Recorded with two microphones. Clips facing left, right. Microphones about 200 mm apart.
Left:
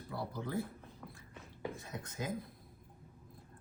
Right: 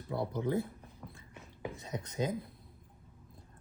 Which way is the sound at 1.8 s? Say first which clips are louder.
Right 7 dB; 20° right (ahead or behind).